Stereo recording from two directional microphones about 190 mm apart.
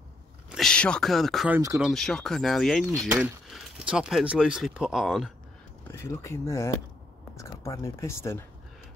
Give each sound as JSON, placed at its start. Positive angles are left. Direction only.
{"t": 0.5, "sound": "speech", "side_deg": 0}
{"t": 5.9, "sound": "speech", "side_deg": 15}